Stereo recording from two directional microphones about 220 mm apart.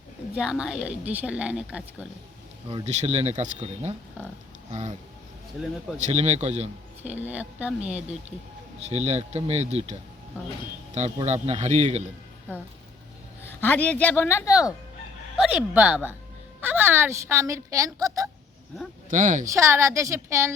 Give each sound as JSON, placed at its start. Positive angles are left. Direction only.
{"t": 0.3, "sound": "speech", "side_deg": -5}
{"t": 2.6, "sound": "a man's voice", "side_deg": -30}
{"t": 6.1, "sound": "a man's voice", "side_deg": -30}
{"t": 7.0, "sound": "a woman's voice", "side_deg": -10}
{"t": 8.9, "sound": "speech", "side_deg": -30}
{"t": 10.9, "sound": "a man's voice", "side_deg": -30}
{"t": 13.4, "sound": "a woman's voice", "side_deg": 10}
{"t": 15.4, "sound": "a woman's voice", "side_deg": -5}
{"t": 19.1, "sound": "a man's voice", "side_deg": -35}
{"t": 19.5, "sound": "a woman's voice", "side_deg": -15}